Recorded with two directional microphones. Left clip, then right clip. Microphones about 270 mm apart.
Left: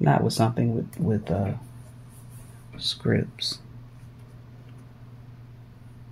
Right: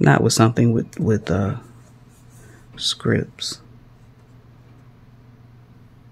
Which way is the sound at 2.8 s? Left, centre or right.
Right.